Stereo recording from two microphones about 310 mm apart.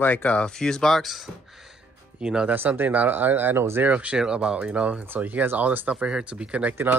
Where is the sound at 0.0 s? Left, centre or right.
Centre.